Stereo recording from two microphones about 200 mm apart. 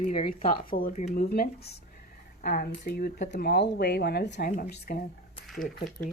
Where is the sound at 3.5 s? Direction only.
55° left (ahead or behind).